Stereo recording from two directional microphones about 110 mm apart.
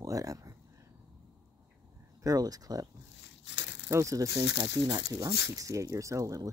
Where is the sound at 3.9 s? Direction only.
30° right (ahead or behind).